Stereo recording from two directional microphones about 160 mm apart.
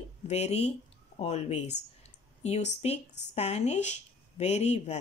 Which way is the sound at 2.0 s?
40° left (ahead or behind).